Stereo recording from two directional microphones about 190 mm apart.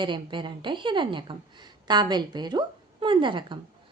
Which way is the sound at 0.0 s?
25° right (ahead or behind).